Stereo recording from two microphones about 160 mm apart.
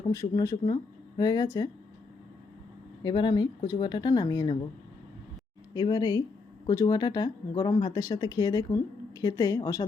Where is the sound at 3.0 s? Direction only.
30° left (ahead or behind).